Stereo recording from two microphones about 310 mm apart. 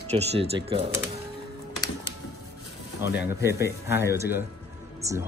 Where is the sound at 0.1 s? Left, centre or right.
Centre.